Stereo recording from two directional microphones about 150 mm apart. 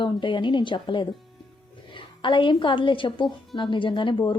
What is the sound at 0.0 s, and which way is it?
Speech, 30° left (ahead or behind).